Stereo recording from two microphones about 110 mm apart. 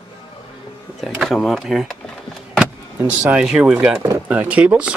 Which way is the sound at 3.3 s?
5° right (ahead or behind).